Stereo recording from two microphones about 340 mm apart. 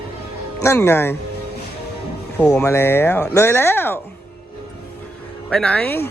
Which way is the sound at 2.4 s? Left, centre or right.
Centre.